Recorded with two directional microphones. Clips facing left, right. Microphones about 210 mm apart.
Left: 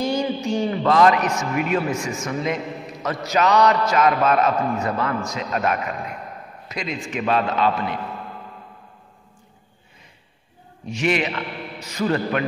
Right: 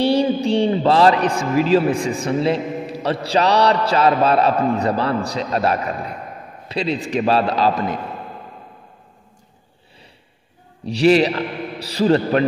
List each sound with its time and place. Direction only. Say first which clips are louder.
0.0 s a man's voice: right 6 dB; 35° right (ahead or behind)
10.9 s a man's voice: right 8 dB; 35° right (ahead or behind)